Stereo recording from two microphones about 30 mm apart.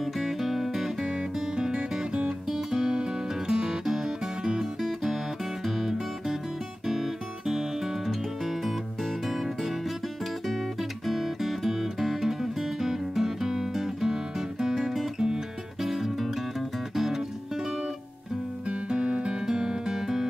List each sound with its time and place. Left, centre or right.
0.0 s music: centre
1.0 s music: right
15.9 s music: centre
18.7 s music: right
19.4 s music: right